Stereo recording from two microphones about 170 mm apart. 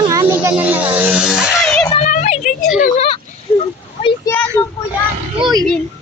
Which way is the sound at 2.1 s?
45° left (ahead or behind).